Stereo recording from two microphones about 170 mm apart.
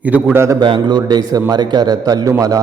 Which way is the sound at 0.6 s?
25° right (ahead or behind).